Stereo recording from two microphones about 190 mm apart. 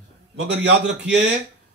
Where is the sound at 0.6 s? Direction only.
65° right (ahead or behind).